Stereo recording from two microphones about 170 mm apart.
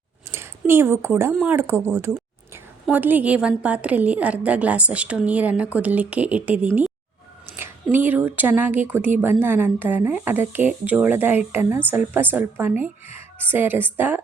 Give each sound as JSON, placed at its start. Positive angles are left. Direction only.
{"t": 0.3, "sound": "a woman's voice", "side_deg": -15}